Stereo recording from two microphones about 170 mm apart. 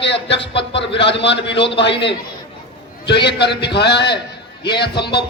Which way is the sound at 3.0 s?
85° left.